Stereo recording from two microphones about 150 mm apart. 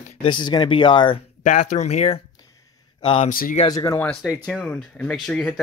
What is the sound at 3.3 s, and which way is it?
Speech, 70° left (ahead or behind).